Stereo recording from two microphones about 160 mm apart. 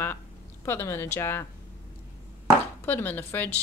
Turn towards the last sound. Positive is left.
turn(degrees=10)  # may be behind; listen again after turning